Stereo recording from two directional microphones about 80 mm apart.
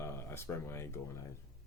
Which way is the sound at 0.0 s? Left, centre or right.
Left.